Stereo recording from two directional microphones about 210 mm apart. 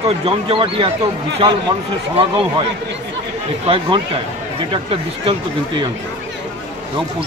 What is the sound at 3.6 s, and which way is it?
Speech, 25° right (ahead or behind).